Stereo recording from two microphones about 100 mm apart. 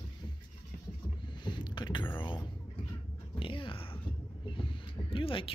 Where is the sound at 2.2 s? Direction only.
55° left (ahead or behind).